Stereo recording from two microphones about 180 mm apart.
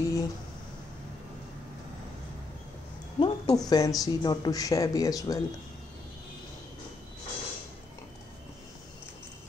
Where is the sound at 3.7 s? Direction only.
20° left (ahead or behind).